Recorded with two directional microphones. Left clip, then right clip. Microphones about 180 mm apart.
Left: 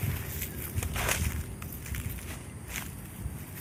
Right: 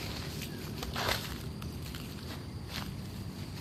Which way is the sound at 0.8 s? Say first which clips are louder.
Left 2 dB; 15° left (ahead or behind).